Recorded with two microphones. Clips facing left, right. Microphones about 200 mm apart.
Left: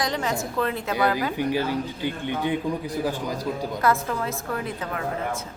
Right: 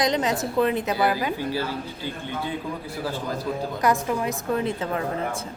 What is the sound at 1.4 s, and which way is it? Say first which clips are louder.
A man's voice: left 3 dB; 15° left (ahead or behind).